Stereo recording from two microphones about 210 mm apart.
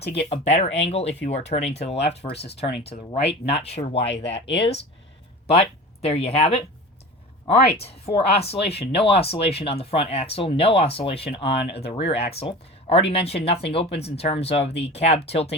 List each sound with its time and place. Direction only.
0.1 s speech: 30° left (ahead or behind)
5.5 s speech: 30° left (ahead or behind)
11.9 s speech: 55° left (ahead or behind)
12.1 s speech: 30° left (ahead or behind)